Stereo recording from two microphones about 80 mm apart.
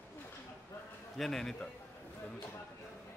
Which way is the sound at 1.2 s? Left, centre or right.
Centre.